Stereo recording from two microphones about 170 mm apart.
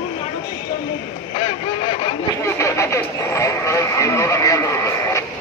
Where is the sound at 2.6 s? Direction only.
15° left (ahead or behind).